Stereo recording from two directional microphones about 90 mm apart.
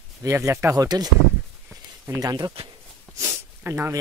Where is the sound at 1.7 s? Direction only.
40° right (ahead or behind).